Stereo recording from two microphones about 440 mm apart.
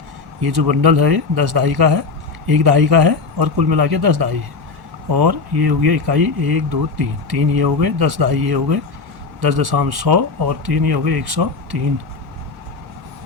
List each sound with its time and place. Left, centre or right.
0.4 s speech: right